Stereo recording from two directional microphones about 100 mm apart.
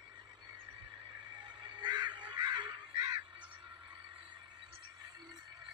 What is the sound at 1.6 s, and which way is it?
Crow, 45° right (ahead or behind).